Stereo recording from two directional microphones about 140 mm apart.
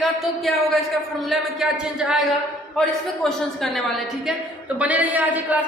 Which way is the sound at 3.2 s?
Centre (ahead or behind).